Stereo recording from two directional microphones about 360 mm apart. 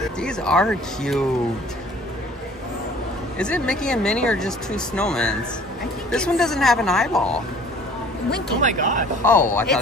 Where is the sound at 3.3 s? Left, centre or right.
Centre.